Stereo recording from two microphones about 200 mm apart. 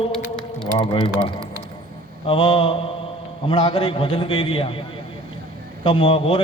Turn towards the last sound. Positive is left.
turn(degrees=25)  # may be behind; listen again after turning